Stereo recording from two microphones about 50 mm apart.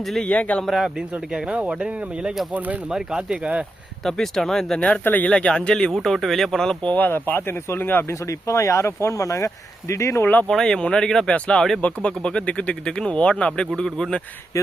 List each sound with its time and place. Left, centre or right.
0.0 s a man's voice: centre
0.3 s speech: left
0.6 s a man's voice: centre
1.5 s speech: right
2.9 s speech: centre
4.0 s speech: centre
5.0 s speech: left
5.3 s speech: centre
6.8 s speech: left
8.1 s speech: left
10.5 s speech: centre
14.5 s speech: left